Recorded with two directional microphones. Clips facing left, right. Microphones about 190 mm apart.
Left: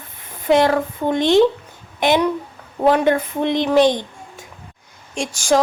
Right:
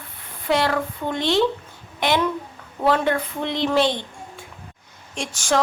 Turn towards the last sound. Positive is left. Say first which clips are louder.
# left 5 dB
turn(degrees=15)  # may be behind; listen again after turning